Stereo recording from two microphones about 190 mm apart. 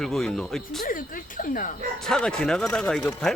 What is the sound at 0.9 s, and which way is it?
Speech, 45° left (ahead or behind).